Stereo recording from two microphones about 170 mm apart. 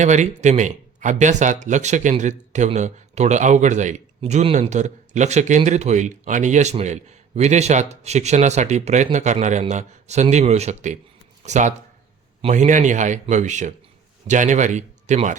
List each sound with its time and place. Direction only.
0.0 s speech: 45° right (ahead or behind)